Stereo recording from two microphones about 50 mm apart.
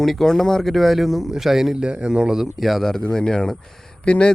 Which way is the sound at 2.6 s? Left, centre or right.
Centre.